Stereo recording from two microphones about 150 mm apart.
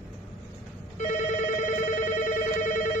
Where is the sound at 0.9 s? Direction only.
60° left (ahead or behind).